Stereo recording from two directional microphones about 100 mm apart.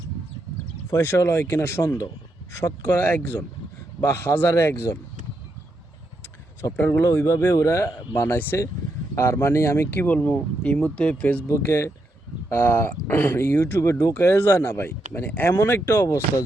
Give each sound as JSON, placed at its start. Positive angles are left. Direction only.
{"t": 0.9, "sound": "speech", "side_deg": 30}
{"t": 6.7, "sound": "speech", "side_deg": 20}
{"t": 7.3, "sound": "speech", "side_deg": 35}
{"t": 11.4, "sound": "speech", "side_deg": 30}